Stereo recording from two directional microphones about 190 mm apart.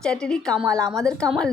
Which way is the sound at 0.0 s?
5° left (ahead or behind).